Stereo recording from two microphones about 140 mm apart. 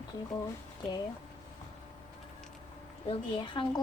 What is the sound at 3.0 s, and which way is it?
Speech, 35° left (ahead or behind).